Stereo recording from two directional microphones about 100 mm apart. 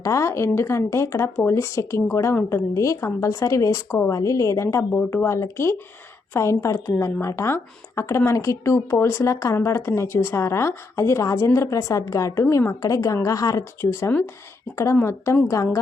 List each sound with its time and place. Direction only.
0.0 s a woman's voice: 30° left (ahead or behind)